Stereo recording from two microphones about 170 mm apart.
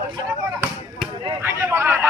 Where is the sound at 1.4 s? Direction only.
15° right (ahead or behind).